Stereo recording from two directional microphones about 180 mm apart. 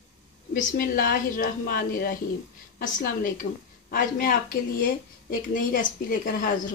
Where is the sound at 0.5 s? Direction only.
50° left (ahead or behind).